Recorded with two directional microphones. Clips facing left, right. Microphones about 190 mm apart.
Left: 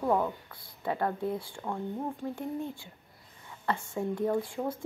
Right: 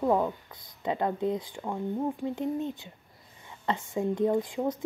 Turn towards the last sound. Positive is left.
turn(degrees=-15)  # may be behind; listen again after turning